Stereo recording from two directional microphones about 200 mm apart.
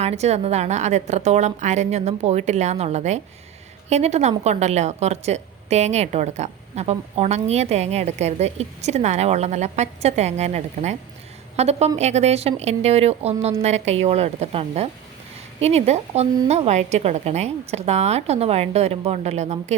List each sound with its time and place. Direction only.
0.0 s a woman's voice: 35° right (ahead or behind)